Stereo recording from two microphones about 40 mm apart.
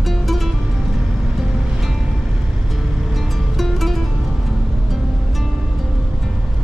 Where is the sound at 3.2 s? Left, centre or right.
Centre.